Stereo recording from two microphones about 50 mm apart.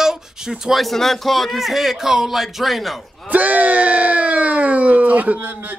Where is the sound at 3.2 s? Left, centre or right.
Right.